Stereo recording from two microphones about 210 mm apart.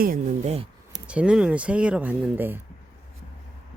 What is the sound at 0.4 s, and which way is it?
Speech, 30° right (ahead or behind).